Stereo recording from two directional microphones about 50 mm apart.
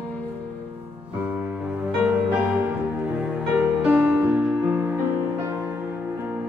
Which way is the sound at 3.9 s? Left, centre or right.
Right.